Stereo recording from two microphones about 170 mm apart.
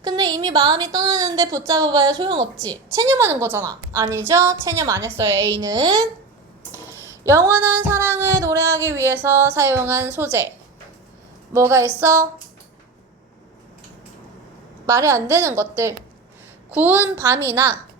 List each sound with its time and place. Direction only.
0.0 s a woman's voice: 25° right (ahead or behind)
7.3 s a woman's voice: 15° right (ahead or behind)
11.5 s a woman's voice: 15° right (ahead or behind)
14.8 s a woman's voice: 20° right (ahead or behind)